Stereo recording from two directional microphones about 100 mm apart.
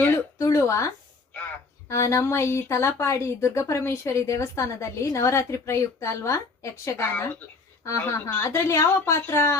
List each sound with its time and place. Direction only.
0.0 s speech: 25° left (ahead or behind)
1.9 s speech: 30° left (ahead or behind)